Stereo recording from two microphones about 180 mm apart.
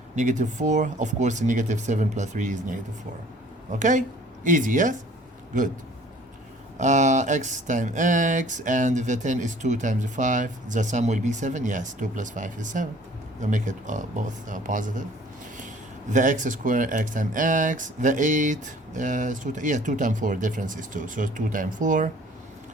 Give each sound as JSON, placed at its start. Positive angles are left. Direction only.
{"t": 0.2, "sound": "speech", "side_deg": -45}
{"t": 6.7, "sound": "speech", "side_deg": -40}